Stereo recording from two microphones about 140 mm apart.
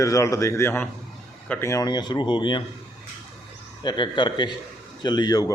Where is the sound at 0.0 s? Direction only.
25° left (ahead or behind).